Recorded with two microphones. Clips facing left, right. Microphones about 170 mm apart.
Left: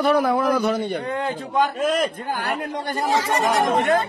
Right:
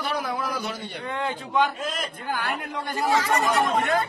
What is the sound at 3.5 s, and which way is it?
Speech, 85° left.